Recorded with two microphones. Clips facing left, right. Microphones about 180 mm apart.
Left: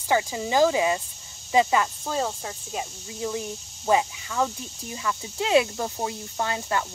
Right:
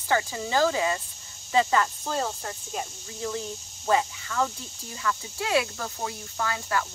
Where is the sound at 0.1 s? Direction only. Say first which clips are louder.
Left 2 dB; 15° left (ahead or behind).